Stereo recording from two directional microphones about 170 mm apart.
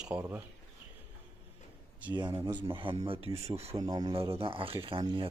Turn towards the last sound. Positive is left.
turn(degrees=-30)  # may be behind; listen again after turning